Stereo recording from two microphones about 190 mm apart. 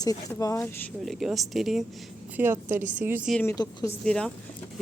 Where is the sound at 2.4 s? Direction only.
15° right (ahead or behind).